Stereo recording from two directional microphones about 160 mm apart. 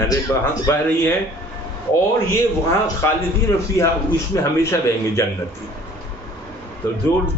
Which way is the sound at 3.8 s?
20° left (ahead or behind).